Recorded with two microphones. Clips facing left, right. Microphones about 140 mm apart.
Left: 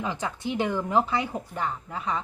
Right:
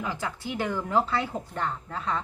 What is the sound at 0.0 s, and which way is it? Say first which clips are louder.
Speech: left 2 dB; 20° left (ahead or behind).